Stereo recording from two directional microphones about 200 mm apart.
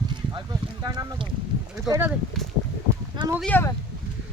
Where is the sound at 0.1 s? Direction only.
20° right (ahead or behind).